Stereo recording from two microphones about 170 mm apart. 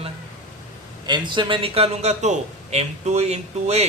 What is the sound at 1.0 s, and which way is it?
A man's voice, 25° right (ahead or behind).